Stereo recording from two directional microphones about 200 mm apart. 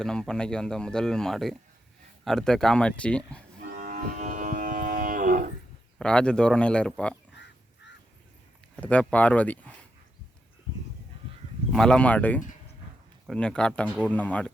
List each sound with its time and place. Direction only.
0.0 s speech: 5° left (ahead or behind)
3.7 s livestock: 40° right (ahead or behind)
6.0 s speech: 5° left (ahead or behind)
8.7 s speech: 5° left (ahead or behind)
11.7 s speech: 5° left (ahead or behind)